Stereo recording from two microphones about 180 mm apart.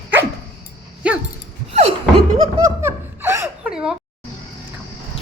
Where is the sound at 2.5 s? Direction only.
15° right (ahead or behind).